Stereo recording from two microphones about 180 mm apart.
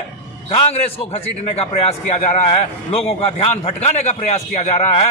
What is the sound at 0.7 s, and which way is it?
A man's voice, 35° left (ahead or behind).